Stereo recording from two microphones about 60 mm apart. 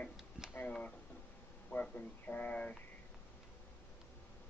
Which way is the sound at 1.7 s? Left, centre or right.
Left.